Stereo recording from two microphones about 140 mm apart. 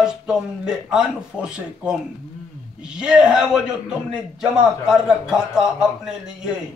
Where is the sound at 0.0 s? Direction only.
5° right (ahead or behind).